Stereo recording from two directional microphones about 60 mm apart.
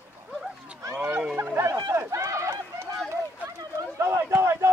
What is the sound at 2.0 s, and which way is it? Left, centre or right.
Run, right.